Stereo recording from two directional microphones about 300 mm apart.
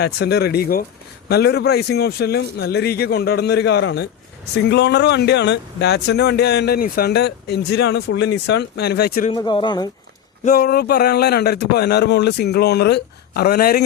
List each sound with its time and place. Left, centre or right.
0.0 s speech: left
9.3 s speech: centre
10.4 s speech: left